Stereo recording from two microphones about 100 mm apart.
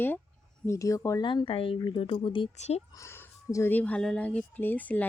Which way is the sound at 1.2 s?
50° left (ahead or behind).